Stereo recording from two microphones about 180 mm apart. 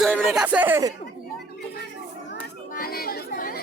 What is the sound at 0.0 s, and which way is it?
Speech, centre (ahead or behind).